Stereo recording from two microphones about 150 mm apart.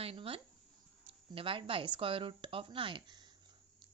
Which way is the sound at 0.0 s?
40° right (ahead or behind).